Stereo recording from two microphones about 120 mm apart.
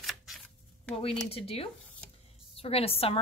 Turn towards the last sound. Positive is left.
turn(degrees=55)  # may be behind; listen again after turning